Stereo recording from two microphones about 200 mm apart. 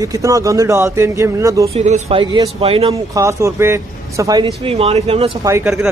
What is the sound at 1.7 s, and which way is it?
Speech, 35° right (ahead or behind).